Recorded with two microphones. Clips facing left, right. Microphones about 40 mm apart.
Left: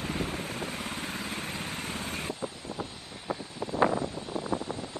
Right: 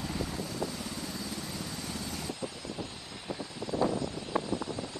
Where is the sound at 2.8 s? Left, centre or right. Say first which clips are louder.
Left 2 dB; left.